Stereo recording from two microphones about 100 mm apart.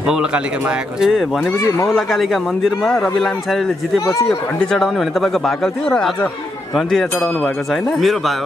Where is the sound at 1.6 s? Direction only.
30° left (ahead or behind).